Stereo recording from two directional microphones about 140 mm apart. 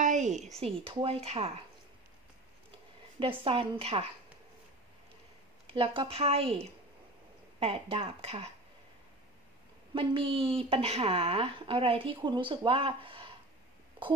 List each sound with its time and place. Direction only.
0.0 s a sound: 60° right (ahead or behind)
0.8 s a woman's voice: 45° right (ahead or behind)
3.2 s a woman's voice: 40° right (ahead or behind)
5.7 s a woman's voice: 40° right (ahead or behind)
9.9 s a woman's voice: 40° right (ahead or behind)